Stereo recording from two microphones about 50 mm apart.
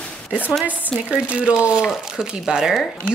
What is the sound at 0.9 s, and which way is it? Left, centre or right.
A woman's voice, right.